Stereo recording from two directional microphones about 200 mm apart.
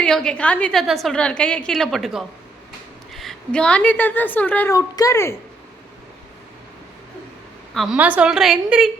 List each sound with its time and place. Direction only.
0.0 s a woman's voice: 5° left (ahead or behind)
7.7 s a woman's voice: centre (ahead or behind)